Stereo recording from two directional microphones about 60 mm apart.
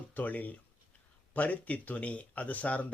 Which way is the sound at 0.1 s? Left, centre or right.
Left.